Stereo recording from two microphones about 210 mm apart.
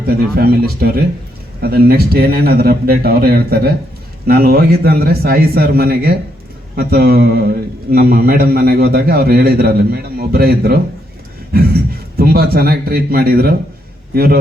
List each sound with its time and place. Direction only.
0.1 s a man's voice: 45° right (ahead or behind)